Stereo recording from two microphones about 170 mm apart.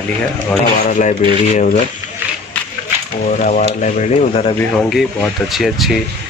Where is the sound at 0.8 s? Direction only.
45° left (ahead or behind).